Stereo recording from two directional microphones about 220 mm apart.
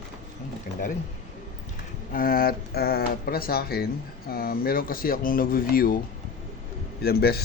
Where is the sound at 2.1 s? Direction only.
40° left (ahead or behind).